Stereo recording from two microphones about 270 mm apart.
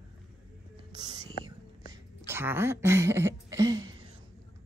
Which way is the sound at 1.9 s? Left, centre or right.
Centre.